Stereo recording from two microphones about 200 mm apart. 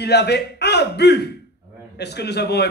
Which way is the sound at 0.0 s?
55° left (ahead or behind).